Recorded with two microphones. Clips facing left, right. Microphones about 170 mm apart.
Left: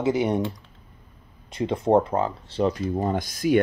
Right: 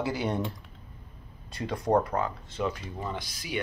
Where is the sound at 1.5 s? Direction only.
25° left (ahead or behind).